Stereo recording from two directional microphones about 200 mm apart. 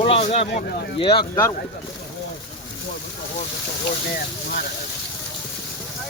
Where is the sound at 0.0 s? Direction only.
30° left (ahead or behind).